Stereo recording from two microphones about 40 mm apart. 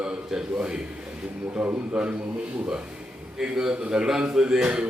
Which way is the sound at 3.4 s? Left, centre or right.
Centre.